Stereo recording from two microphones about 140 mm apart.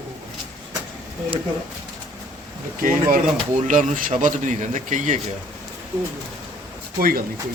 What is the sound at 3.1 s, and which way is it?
Speech, 60° right (ahead or behind).